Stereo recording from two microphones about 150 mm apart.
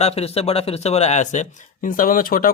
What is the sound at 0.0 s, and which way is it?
Speech, 45° left (ahead or behind).